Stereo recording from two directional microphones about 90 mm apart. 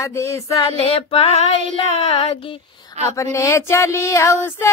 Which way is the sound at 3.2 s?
35° left (ahead or behind).